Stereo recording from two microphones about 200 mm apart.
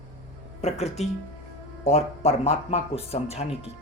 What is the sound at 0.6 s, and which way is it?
Speech, 35° left (ahead or behind).